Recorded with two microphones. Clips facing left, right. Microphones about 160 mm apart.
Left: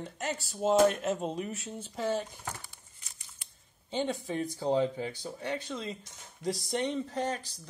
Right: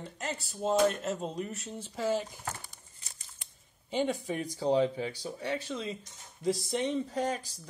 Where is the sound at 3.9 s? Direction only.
10° right (ahead or behind).